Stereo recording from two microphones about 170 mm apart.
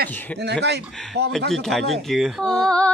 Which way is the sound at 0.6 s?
80° right.